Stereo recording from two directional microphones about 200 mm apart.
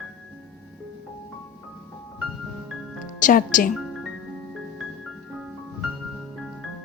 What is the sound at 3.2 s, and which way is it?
Speech, 40° left (ahead or behind).